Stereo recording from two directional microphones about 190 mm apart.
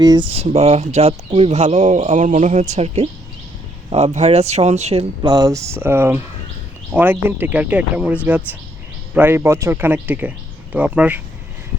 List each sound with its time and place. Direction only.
0.0 s speech: 20° right (ahead or behind)
0.3 s speech: 35° right (ahead or behind); by 11.2 s 5° right (ahead or behind)